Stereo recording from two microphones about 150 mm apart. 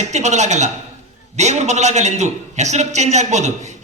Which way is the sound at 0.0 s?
50° right (ahead or behind).